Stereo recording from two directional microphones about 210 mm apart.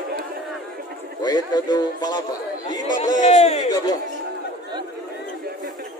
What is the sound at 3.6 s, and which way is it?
Speech, 20° left (ahead or behind).